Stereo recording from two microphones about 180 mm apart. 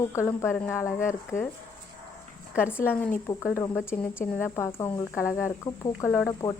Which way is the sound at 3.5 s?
15° left (ahead or behind).